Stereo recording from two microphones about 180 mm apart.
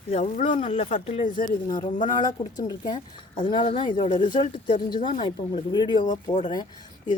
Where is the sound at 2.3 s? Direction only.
20° left (ahead or behind).